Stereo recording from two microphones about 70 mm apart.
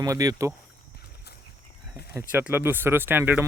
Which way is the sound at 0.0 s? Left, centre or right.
Right.